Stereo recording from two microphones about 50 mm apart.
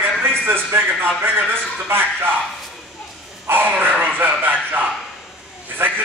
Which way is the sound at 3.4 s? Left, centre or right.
Right.